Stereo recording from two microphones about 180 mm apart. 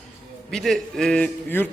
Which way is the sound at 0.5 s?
Centre (ahead or behind).